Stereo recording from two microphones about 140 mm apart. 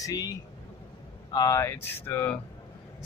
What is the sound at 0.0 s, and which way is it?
Speech, 25° left (ahead or behind).